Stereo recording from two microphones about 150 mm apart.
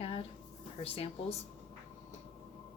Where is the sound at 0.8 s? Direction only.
40° left (ahead or behind).